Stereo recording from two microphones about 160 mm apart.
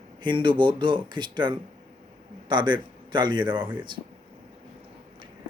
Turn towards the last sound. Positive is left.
turn(degrees=-30)  # may be behind; listen again after turning